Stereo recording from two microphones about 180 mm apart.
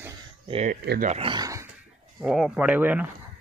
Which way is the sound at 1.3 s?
20° right (ahead or behind).